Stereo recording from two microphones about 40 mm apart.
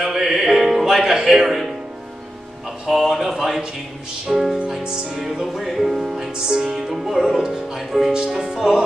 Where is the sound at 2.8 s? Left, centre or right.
Centre.